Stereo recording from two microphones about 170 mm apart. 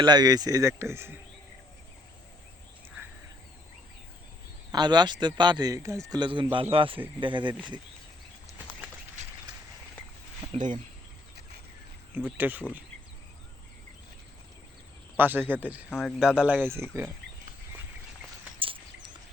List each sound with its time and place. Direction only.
0.0 s speech: 25° right (ahead or behind)
4.7 s speech: 25° right (ahead or behind)
10.4 s a sound: 30° right (ahead or behind)
12.1 s speech: 10° right (ahead or behind)
15.2 s speech: 10° right (ahead or behind)